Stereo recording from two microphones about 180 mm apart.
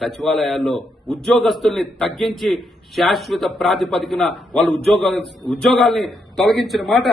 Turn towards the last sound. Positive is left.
turn(degrees=0)  # may be behind; listen again after turning